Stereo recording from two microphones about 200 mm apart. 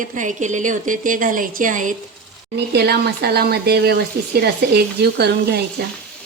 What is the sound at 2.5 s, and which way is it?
Speech, 55° right (ahead or behind).